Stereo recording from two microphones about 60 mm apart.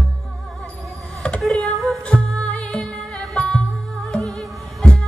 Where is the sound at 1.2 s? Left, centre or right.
Centre.